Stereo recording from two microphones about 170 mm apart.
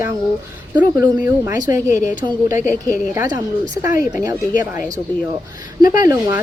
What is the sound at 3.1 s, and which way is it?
Speech, 20° right (ahead or behind).